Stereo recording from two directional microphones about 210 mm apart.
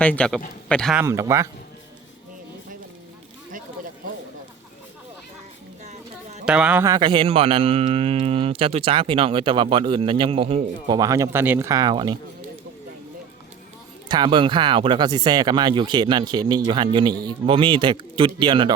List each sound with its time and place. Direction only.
0.0 s a man's voice: 5° left (ahead or behind)
1.0 s speech: 15° right (ahead or behind)
5.8 s a sound: 35° right (ahead or behind)
6.4 s a man's voice: 5° right (ahead or behind); by 12.1 s 20° right (ahead or behind)
14.1 s a man's voice: 20° right (ahead or behind)